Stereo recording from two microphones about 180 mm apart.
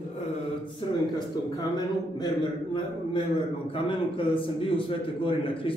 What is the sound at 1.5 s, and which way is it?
Speech, 25° left (ahead or behind).